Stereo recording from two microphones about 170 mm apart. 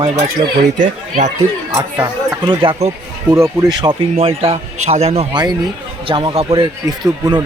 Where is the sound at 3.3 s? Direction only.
20° right (ahead or behind).